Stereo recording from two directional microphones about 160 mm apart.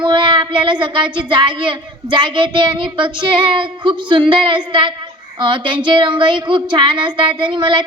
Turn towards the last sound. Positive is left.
turn(degrees=-30)  # may be behind; listen again after turning